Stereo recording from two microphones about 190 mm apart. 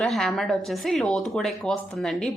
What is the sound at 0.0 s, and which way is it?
A woman's voice, centre (ahead or behind).